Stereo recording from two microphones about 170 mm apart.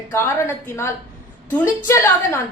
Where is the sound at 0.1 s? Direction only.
15° left (ahead or behind).